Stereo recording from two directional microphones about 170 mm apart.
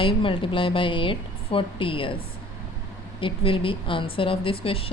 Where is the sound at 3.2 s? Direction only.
30° left (ahead or behind).